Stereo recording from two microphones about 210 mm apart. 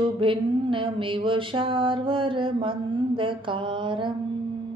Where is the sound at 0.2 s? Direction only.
25° right (ahead or behind).